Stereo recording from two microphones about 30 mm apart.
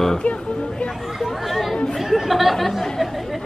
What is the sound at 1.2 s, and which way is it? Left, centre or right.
Chatter, centre.